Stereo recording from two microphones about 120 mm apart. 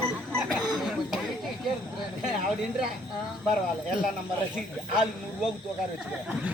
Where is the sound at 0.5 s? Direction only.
5° right (ahead or behind).